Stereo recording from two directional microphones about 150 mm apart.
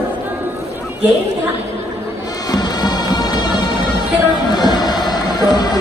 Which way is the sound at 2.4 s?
25° left (ahead or behind).